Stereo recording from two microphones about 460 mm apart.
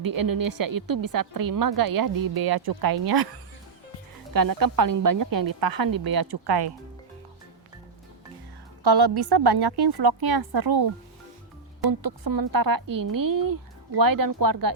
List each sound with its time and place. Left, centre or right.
0.0 s a woman's voice: right
4.4 s a woman's voice: right
8.8 s a woman's voice: right
11.9 s a woman's voice: right